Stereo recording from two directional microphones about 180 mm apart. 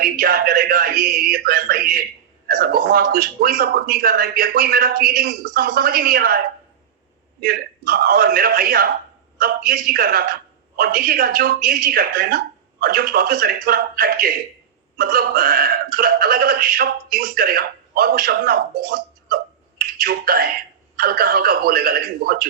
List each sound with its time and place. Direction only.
0.0 s speech: 55° right (ahead or behind)
7.4 s speech: 55° right (ahead or behind)